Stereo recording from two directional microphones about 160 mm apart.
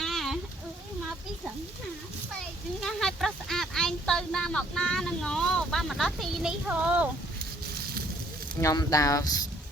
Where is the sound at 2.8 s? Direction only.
Centre (ahead or behind).